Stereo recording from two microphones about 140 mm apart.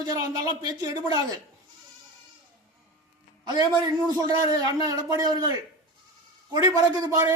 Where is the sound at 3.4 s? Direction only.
30° right (ahead or behind).